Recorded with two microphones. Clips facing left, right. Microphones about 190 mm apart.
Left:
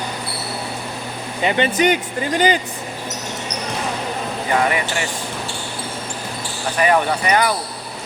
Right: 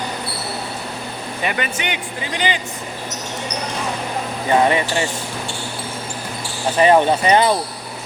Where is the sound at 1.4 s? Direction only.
25° left (ahead or behind).